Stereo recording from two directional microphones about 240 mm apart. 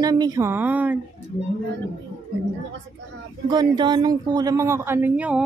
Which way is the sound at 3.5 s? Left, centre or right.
Centre.